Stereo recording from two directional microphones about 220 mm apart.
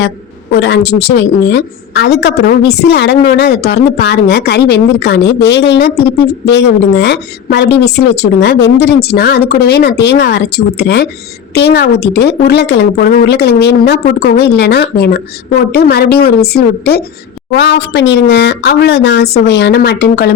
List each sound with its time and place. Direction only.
0.6 s a woman's voice: 50° left (ahead or behind)